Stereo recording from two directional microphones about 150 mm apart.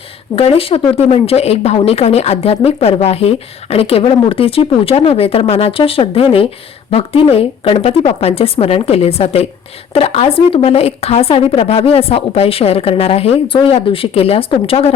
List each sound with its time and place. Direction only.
0.3 s speech: 40° left (ahead or behind)